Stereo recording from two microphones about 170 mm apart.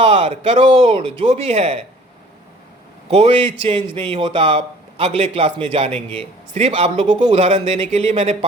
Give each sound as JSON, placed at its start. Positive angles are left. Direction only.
{"t": 0.0, "sound": "a man's voice", "side_deg": -35}
{"t": 3.1, "sound": "a man's voice", "side_deg": -35}